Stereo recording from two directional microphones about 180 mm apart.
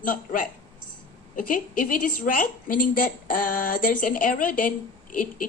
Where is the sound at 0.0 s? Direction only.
50° left (ahead or behind).